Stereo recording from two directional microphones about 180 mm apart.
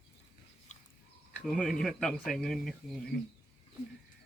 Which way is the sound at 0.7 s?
40° left (ahead or behind).